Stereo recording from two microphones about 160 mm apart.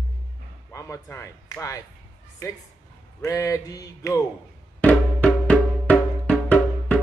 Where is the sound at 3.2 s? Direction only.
20° left (ahead or behind).